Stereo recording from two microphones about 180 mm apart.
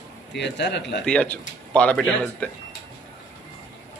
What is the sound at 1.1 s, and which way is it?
Speech, 5° left (ahead or behind).